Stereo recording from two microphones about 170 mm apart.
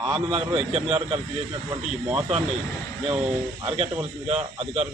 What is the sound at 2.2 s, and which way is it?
Speech, 35° right (ahead or behind).